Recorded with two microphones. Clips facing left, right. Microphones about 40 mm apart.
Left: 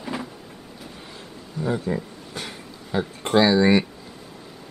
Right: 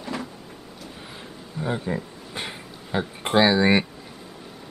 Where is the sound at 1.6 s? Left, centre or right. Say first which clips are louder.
Left 2 dB; right.